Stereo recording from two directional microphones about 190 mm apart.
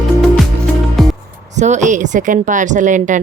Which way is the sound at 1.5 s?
40° right (ahead or behind).